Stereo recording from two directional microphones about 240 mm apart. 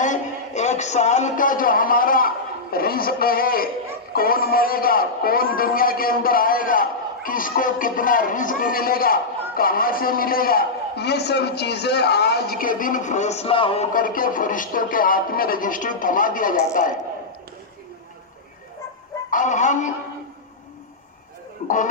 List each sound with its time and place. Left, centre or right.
0.0 s a man's voice: left
13.9 s a man's voice: left
19.3 s speech: left